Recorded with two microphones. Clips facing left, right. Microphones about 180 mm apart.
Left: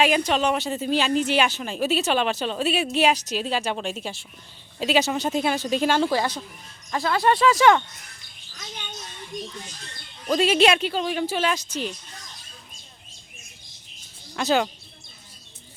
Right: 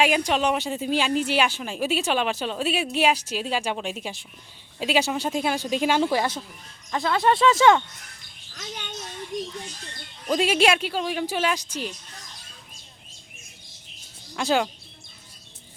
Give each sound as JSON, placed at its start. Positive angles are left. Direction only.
{"t": 0.0, "sound": "speech", "side_deg": -15}
{"t": 5.3, "sound": "speech", "side_deg": 0}
{"t": 5.5, "sound": "speech", "side_deg": -10}
{"t": 6.9, "sound": "speech", "side_deg": 0}
{"t": 7.4, "sound": "speech", "side_deg": -25}
{"t": 10.2, "sound": "speech", "side_deg": -10}
{"t": 14.3, "sound": "speech", "side_deg": -10}